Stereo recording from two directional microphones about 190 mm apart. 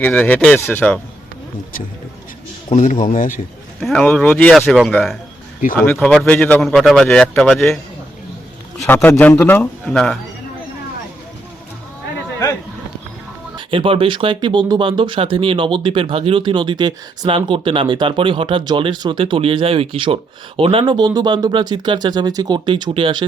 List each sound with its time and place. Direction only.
0.0 s a man's voice: 10° left (ahead or behind)
2.6 s speech: 40° left (ahead or behind)
3.8 s speech: centre (ahead or behind)
8.9 s a man's voice: 10° left (ahead or behind)
13.6 s speech: 30° right (ahead or behind)